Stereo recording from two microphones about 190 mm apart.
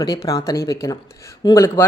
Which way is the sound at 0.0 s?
20° left (ahead or behind).